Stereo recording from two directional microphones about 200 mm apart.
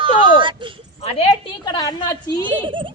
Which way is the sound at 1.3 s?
20° left (ahead or behind).